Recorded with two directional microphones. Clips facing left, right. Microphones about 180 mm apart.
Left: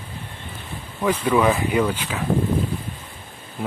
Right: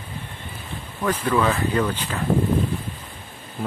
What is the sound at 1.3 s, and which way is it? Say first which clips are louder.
Speech: left 2 dB; 15° left (ahead or behind).